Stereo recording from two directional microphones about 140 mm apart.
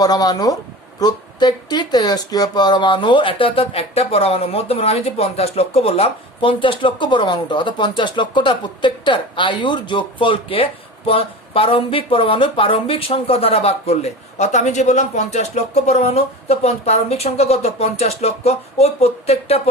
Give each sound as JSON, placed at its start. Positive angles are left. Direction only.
{"t": 0.0, "sound": "speech", "side_deg": 25}